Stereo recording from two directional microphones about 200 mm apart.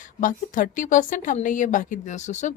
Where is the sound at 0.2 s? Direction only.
40° left (ahead or behind).